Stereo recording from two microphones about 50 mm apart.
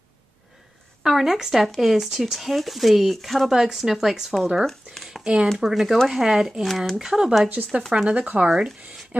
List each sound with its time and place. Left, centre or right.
1.0 s speech: centre
4.6 s a sound: centre
5.2 s speech: centre
5.6 s speech: centre
7.6 s speech: right
7.9 s speech: right
8.5 s speech: centre